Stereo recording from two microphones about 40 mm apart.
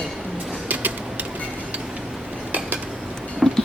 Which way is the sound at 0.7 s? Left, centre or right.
Right.